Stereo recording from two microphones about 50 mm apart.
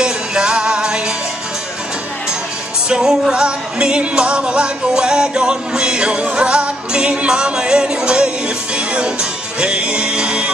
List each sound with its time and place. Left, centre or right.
0.0 s music: centre
2.9 s music: centre